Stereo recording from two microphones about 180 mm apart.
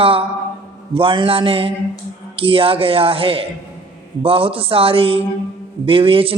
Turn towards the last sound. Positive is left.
turn(degrees=-30)  # may be behind; listen again after turning